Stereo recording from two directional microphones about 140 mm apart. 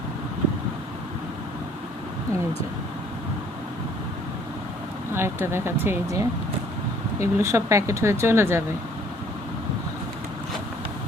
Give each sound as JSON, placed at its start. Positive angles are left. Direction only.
{"t": 5.1, "sound": "speech", "side_deg": -15}